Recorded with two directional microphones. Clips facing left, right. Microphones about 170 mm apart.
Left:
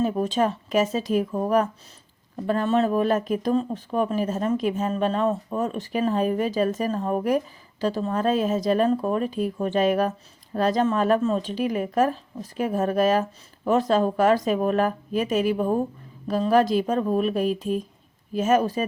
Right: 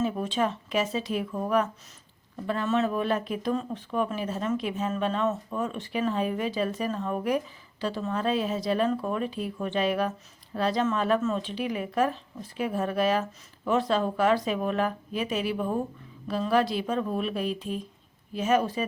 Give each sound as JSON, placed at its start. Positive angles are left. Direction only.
{"t": 0.0, "sound": "speech", "side_deg": 40}